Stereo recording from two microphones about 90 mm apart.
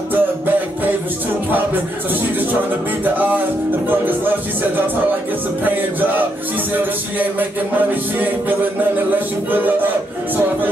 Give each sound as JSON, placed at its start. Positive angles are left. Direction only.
{"t": 0.1, "sound": "music", "side_deg": -20}
{"t": 3.0, "sound": "music", "side_deg": -20}